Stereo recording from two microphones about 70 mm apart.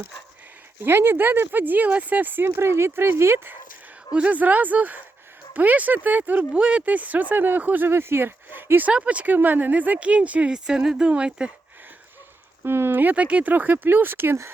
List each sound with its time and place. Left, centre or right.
0.8 s speech: right
4.1 s speech: centre
6.5 s speech: centre; by 8.9 s right
8.9 s speech: centre
12.6 s speech: right